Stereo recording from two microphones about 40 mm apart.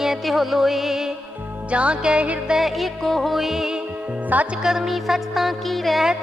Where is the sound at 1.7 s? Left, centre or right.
Right.